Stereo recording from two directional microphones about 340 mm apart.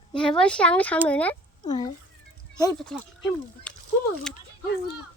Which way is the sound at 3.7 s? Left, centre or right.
Centre.